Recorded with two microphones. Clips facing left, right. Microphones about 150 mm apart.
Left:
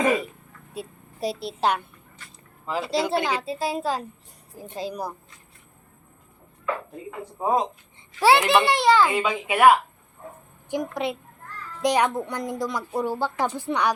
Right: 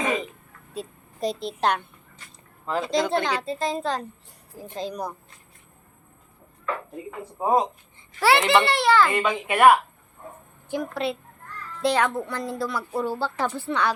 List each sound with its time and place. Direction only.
0.7 s a woman's voice: 10° left (ahead or behind)
7.3 s a woman's voice: 5° right (ahead or behind)
8.2 s a woman's voice: 15° left (ahead or behind)
9.1 s a woman's voice: 5° left (ahead or behind)
10.7 s a woman's voice: 15° left (ahead or behind)